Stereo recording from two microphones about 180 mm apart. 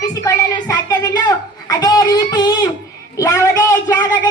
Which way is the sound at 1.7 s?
20° left (ahead or behind).